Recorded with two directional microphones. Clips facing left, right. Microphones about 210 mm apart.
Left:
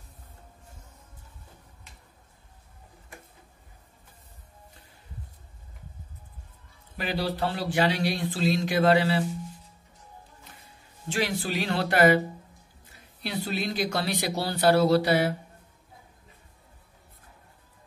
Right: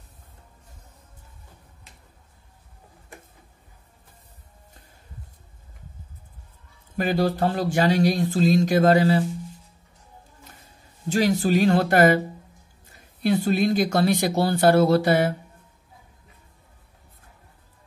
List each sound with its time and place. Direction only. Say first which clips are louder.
7.0 s speech: right 7 dB; 45° right (ahead or behind)
11.1 s speech: right 8 dB; 40° right (ahead or behind)
13.2 s speech: right 10 dB; 50° right (ahead or behind)